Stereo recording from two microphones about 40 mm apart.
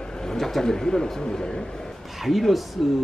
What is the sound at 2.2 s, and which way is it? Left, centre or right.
Speech, centre.